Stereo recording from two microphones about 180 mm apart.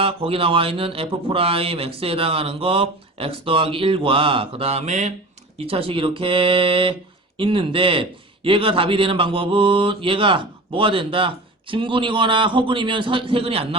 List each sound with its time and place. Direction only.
0.0 s speech: 30° right (ahead or behind)
5.5 s mantra: 30° right (ahead or behind)